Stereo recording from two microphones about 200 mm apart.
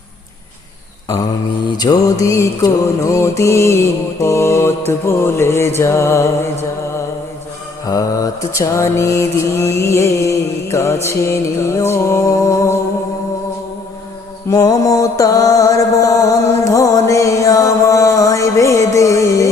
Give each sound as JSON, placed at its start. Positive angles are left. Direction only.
{"t": 1.8, "sound": "mantra", "side_deg": 20}
{"t": 7.9, "sound": "mantra", "side_deg": 20}
{"t": 14.5, "sound": "mantra", "side_deg": 15}